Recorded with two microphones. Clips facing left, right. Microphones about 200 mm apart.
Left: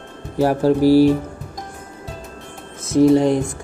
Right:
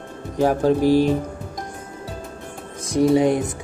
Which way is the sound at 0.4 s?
5° left (ahead or behind).